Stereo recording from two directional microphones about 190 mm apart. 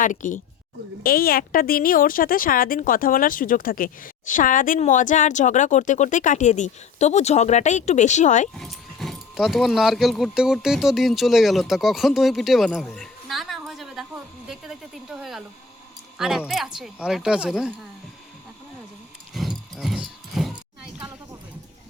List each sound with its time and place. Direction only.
0.0 s a woman's voice: 40° left (ahead or behind)
8.5 s speech: centre (ahead or behind)
19.3 s a sound: centre (ahead or behind)